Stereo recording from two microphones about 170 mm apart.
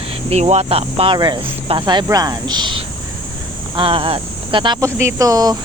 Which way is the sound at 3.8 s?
30° right (ahead or behind).